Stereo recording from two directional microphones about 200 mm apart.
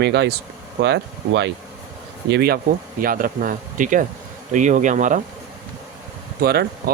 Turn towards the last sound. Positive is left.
turn(degrees=-50)  # may be behind; listen again after turning